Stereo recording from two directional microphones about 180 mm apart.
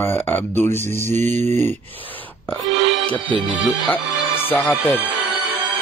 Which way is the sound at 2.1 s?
10° left (ahead or behind).